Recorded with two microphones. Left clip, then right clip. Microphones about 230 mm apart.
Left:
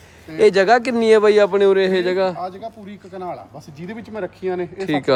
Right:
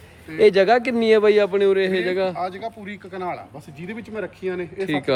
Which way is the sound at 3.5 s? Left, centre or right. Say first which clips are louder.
Left 1 dB; left.